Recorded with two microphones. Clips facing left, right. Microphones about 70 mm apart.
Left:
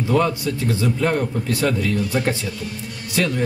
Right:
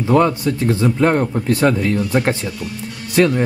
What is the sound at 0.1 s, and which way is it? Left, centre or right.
Speech, right.